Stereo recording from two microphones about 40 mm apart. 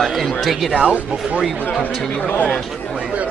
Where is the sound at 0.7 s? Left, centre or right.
Right.